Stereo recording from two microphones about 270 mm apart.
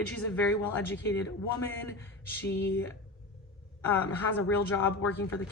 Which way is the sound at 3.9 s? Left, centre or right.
Centre.